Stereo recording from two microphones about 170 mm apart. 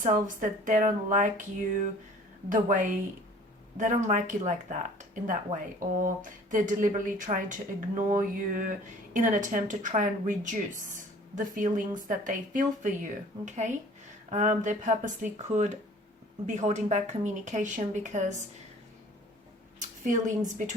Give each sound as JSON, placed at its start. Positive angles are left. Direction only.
{"t": 0.0, "sound": "speech", "side_deg": -50}
{"t": 2.5, "sound": "speech", "side_deg": -50}
{"t": 19.8, "sound": "a woman's voice", "side_deg": -45}